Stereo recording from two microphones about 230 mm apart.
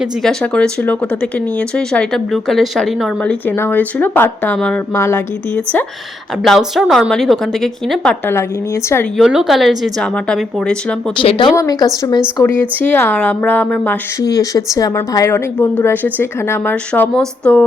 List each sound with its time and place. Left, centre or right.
0.0 s speech: centre
8.3 s a woman's voice: centre
9.1 s speech: centre
11.2 s a woman's voice: left; by 17.6 s centre